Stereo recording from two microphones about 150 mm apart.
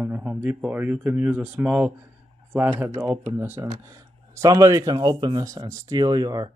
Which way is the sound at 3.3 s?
15° right (ahead or behind).